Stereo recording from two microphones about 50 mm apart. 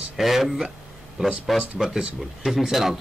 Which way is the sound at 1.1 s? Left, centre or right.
Centre.